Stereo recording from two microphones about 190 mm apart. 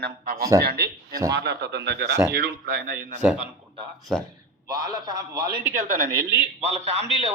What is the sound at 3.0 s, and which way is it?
Speech, 10° right (ahead or behind).